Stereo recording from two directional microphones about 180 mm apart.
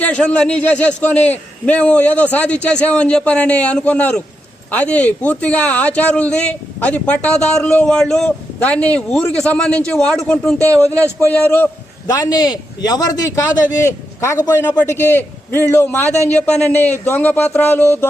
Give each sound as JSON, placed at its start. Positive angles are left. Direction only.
{"t": 0.0, "sound": "a man's voice", "side_deg": 5}
{"t": 12.0, "sound": "a man's voice", "side_deg": 20}